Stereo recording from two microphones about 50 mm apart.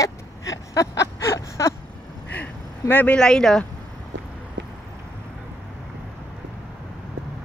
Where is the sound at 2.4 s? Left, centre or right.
Left.